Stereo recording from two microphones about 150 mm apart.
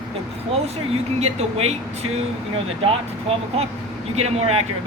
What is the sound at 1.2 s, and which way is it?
Speech, 45° right (ahead or behind).